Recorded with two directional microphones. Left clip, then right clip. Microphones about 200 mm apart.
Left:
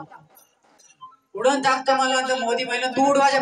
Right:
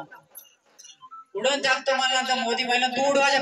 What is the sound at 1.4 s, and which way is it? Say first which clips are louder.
A man's voice: left 3 dB; 60° left (ahead or behind).